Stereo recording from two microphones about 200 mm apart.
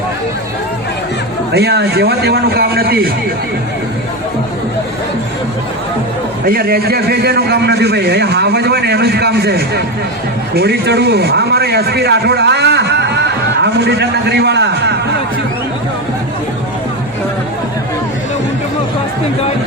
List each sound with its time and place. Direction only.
1.5 s a man's voice: 55° right (ahead or behind)
6.4 s a man's voice: 50° right (ahead or behind)